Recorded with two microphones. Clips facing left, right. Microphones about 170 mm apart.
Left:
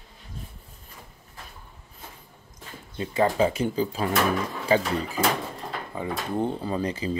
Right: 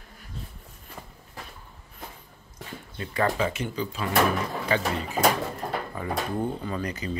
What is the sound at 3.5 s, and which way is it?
Speech, 40° left (ahead or behind).